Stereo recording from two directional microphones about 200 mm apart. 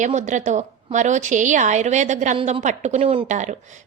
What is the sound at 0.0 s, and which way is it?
A woman's voice, 40° right (ahead or behind).